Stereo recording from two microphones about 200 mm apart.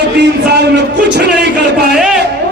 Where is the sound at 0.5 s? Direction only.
55° right (ahead or behind).